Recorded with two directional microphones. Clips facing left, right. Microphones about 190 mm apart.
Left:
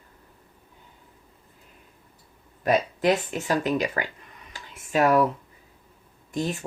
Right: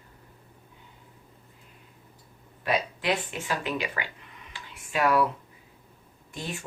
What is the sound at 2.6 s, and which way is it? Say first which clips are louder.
Speech: left 6 dB; 45° left (ahead or behind).